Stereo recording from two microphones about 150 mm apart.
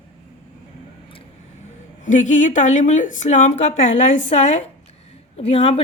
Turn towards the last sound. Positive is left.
turn(degrees=45)  # may be behind; listen again after turning